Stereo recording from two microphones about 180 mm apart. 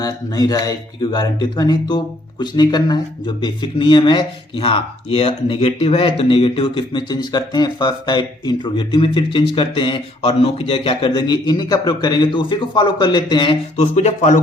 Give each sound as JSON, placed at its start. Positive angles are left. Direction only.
{"t": 0.0, "sound": "speech", "side_deg": 20}
{"t": 13.7, "sound": "speech", "side_deg": 40}